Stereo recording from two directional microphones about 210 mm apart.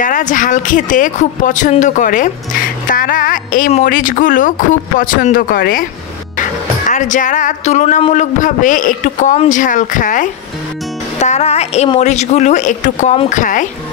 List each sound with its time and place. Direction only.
0.0 s a man's voice: 35° left (ahead or behind)
6.9 s a man's voice: 35° left (ahead or behind)